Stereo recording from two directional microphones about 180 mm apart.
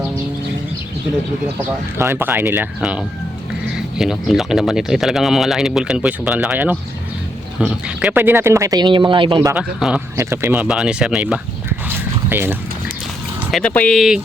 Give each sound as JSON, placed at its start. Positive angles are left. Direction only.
{"t": 2.0, "sound": "speech", "side_deg": -15}
{"t": 9.5, "sound": "speech", "side_deg": -5}
{"t": 11.9, "sound": "dog", "side_deg": -10}
{"t": 13.5, "sound": "speech", "side_deg": 5}